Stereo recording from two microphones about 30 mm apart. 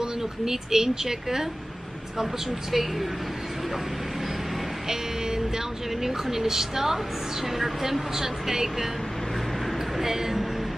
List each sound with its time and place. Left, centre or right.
0.0 s speech: centre
2.7 s speech: centre
6.0 s speech: centre
9.9 s speech: centre